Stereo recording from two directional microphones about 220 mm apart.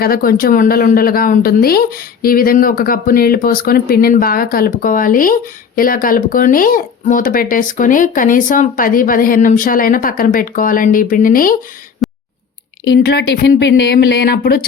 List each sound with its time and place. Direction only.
0.0 s speech: 40° left (ahead or behind)
12.0 s clicking: centre (ahead or behind)
12.8 s speech: 50° left (ahead or behind)